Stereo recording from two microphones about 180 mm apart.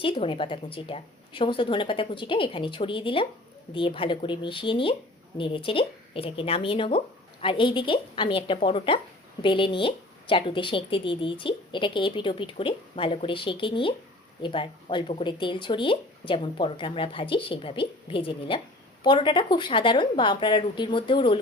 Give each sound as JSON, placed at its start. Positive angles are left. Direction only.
{"t": 0.0, "sound": "speech", "side_deg": 30}